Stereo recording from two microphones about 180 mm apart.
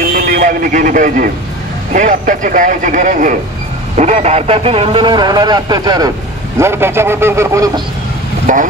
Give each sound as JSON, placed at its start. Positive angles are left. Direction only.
{"t": 0.1, "sound": "a man's voice", "side_deg": -50}
{"t": 8.5, "sound": "a man's voice", "side_deg": -45}